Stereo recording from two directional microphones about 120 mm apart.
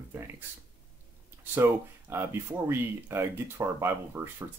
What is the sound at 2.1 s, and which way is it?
Speech, 20° right (ahead or behind).